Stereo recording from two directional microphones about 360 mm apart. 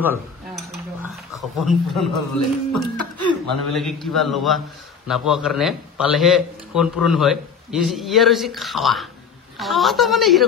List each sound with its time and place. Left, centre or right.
0.0 s dishes: centre
1.6 s a man's voice: centre
2.1 s a man's voice: left
3.2 s a sound: left
3.7 s a man's voice: centre